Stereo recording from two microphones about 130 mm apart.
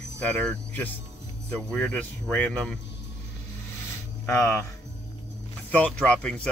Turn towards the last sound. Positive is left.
turn(degrees=10)  # may be behind; listen again after turning